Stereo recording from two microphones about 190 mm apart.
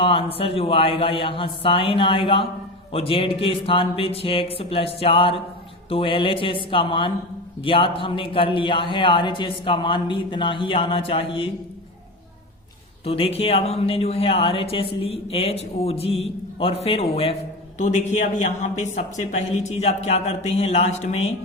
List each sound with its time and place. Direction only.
0.0 s a man's voice: 30° left (ahead or behind)
13.1 s speech: 30° left (ahead or behind)